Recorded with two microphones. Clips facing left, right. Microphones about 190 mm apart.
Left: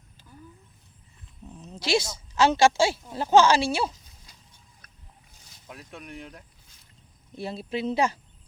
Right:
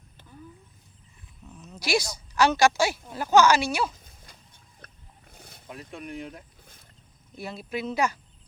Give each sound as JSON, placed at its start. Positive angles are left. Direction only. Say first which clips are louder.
{"t": 1.5, "sound": "a woman's voice", "louder": "left 2 dB", "side_deg": 35}
{"t": 3.9, "sound": "a sound", "louder": "right 3 dB", "side_deg": -55}
{"t": 5.3, "sound": "wild animals", "louder": "right 8 dB", "side_deg": -55}
{"t": 5.6, "sound": "speech", "louder": "right 3 dB", "side_deg": 0}
{"t": 7.3, "sound": "a woman's voice", "louder": "left 2 dB", "side_deg": 30}